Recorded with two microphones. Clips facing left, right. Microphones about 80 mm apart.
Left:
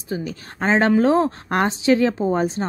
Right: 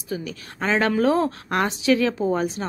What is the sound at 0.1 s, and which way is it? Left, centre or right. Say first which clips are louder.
A woman's voice: left 3 dB; left.